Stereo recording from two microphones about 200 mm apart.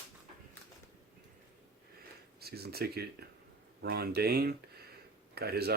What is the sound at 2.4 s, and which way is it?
Speech, 50° right (ahead or behind).